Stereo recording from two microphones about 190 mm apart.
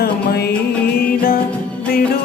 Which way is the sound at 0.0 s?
55° left (ahead or behind).